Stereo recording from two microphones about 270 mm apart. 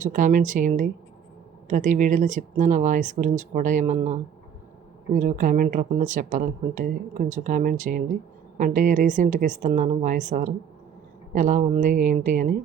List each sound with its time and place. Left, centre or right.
0.0 s speech: right